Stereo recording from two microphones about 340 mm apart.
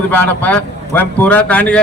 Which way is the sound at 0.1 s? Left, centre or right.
Centre.